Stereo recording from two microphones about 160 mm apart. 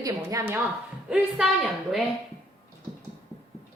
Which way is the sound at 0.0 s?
20° right (ahead or behind).